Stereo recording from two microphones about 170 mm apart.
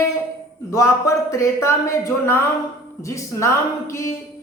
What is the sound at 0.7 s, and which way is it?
Speech, 15° left (ahead or behind).